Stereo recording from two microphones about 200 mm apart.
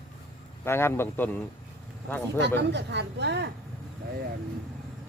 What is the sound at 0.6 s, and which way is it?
Speech, 10° left (ahead or behind).